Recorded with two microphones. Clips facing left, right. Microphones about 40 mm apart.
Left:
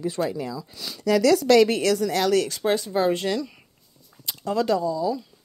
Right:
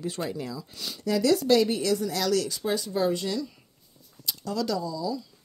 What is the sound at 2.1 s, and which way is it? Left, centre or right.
Speech, left.